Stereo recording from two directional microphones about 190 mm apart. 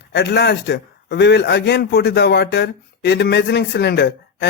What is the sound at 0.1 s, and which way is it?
A man's voice, 60° left (ahead or behind).